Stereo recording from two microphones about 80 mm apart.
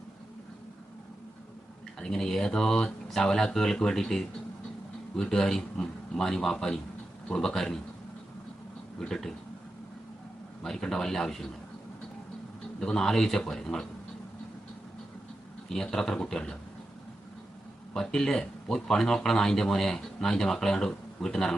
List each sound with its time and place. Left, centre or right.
2.0 s a man's voice: centre
9.0 s a man's voice: centre
10.6 s speech: centre
12.8 s speech: centre
15.7 s speech: centre
17.9 s speech: centre